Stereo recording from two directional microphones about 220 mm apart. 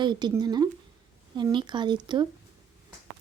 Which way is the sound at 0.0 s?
20° right (ahead or behind).